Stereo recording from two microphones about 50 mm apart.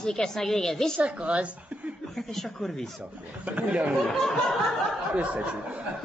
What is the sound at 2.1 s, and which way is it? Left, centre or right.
Speech, centre.